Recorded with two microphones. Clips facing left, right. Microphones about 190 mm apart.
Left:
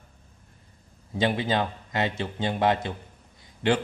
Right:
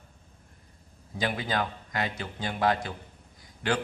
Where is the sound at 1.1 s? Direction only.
25° left (ahead or behind).